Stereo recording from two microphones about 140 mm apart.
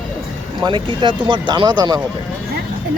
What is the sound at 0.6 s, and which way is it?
Speech, 35° right (ahead or behind).